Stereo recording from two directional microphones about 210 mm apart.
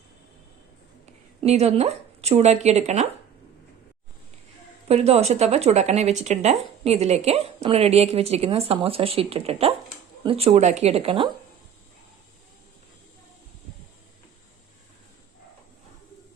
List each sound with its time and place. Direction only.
1.4 s speech: 30° right (ahead or behind)
4.9 s speech: 30° right (ahead or behind)